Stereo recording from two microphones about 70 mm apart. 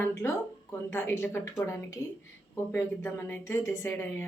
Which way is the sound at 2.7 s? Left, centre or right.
Left.